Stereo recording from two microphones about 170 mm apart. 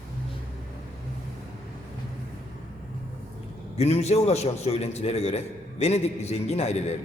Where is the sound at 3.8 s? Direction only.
40° left (ahead or behind).